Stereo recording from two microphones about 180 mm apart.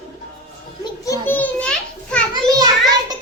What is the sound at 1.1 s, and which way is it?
Children playing, 10° left (ahead or behind).